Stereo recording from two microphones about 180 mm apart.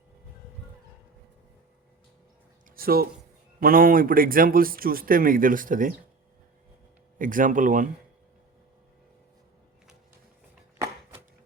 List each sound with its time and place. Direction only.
2.6 s a man's voice: 55° right (ahead or behind)
7.2 s a man's voice: 50° right (ahead or behind)